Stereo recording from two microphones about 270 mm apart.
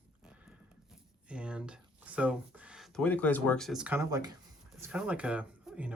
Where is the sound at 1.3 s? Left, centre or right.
Centre.